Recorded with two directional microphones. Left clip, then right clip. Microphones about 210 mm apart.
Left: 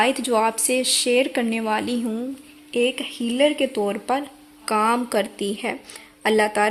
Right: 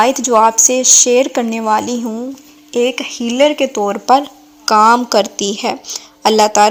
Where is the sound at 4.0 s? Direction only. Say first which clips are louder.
Right 13 dB; 25° right (ahead or behind).